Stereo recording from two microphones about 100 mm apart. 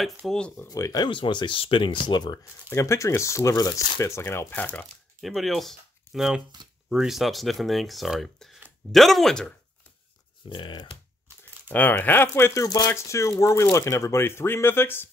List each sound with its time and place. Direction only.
0.2 s speech: centre (ahead or behind)
0.7 s speech: 35° left (ahead or behind)
1.0 s speech: 50° left (ahead or behind)
2.7 s speech: 30° left (ahead or behind)
5.2 s speech: centre (ahead or behind)
10.5 s speech: 50° left (ahead or behind)
11.7 s speech: 15° left (ahead or behind)
12.6 s speech: 35° left (ahead or behind)